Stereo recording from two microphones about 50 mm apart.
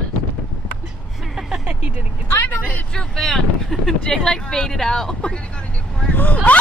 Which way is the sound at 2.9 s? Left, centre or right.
Centre.